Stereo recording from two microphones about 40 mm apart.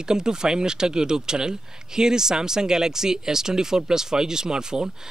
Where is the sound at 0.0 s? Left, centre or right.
Centre.